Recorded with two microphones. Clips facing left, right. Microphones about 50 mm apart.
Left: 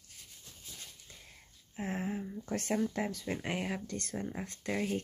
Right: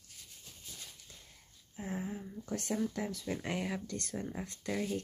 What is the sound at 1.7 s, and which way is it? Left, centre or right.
Speech, left.